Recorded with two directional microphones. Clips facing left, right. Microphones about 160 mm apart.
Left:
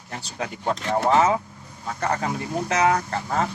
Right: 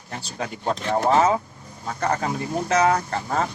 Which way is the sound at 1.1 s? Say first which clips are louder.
Even; 35° right (ahead or behind).